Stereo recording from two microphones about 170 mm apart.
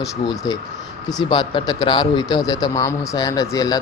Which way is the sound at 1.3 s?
25° left (ahead or behind).